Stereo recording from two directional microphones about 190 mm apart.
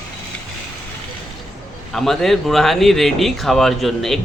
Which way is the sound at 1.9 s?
Centre (ahead or behind).